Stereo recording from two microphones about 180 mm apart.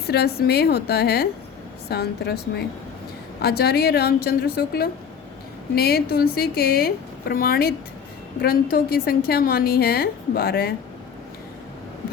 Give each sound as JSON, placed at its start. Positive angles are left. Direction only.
{"t": 0.1, "sound": "a woman's voice", "side_deg": 60}